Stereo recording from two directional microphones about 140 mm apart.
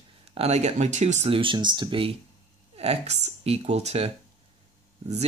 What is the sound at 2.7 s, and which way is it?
Speech, 50° right (ahead or behind).